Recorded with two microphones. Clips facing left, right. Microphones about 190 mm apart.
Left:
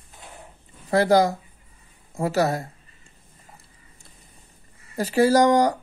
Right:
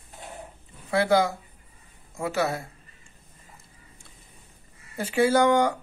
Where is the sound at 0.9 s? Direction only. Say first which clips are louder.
Left 4 dB; 40° left (ahead or behind).